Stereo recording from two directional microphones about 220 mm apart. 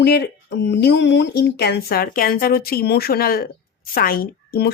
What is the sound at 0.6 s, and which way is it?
Speech, 50° left (ahead or behind).